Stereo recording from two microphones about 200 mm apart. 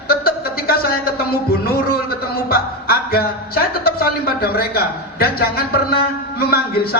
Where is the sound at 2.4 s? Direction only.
50° left (ahead or behind).